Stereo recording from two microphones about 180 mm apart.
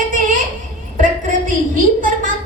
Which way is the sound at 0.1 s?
45° right (ahead or behind).